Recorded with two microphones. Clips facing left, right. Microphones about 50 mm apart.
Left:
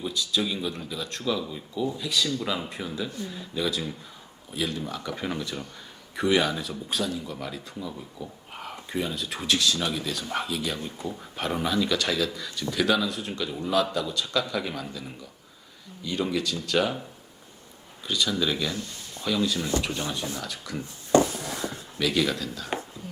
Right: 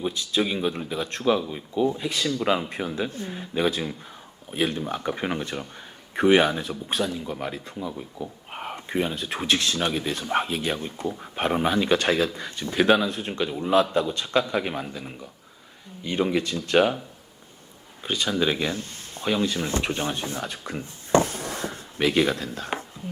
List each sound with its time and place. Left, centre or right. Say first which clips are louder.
0.0 s speech: right 3 dB; right
18.0 s speech: right 2 dB; right